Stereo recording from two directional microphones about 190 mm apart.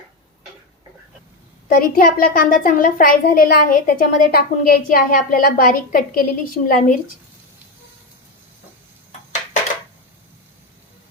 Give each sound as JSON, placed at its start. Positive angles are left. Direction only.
{"t": 1.7, "sound": "a child's voice", "side_deg": 50}